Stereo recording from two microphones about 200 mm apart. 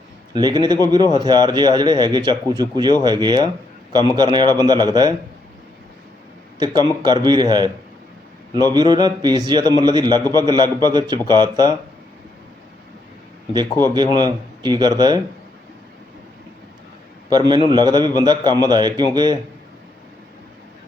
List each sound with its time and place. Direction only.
0.3 s speech: 20° right (ahead or behind)
6.6 s speech: 20° right (ahead or behind)
13.8 s speech: 20° right (ahead or behind)
17.2 s a man's voice: 20° right (ahead or behind)